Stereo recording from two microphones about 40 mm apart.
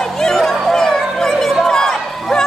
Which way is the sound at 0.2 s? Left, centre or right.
Centre.